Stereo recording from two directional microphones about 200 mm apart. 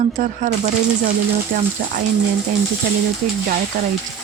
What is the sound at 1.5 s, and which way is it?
Speech, 45° right (ahead or behind).